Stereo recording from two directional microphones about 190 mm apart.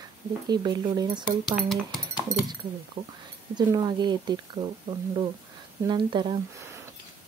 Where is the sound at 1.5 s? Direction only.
Centre (ahead or behind).